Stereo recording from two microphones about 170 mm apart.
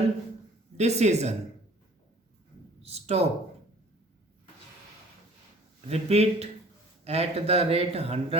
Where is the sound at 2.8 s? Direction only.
40° right (ahead or behind).